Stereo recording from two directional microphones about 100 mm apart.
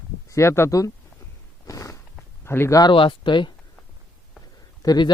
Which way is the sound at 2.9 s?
60° left (ahead or behind).